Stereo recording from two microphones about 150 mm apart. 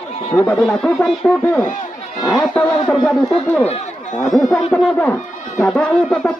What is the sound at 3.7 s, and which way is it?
Speech, 55° left (ahead or behind).